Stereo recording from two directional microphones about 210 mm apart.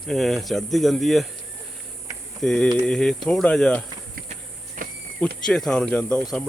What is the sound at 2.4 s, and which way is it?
Speech, 5° left (ahead or behind).